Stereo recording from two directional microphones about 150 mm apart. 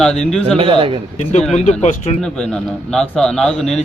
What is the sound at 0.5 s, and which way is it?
Speech, 35° right (ahead or behind).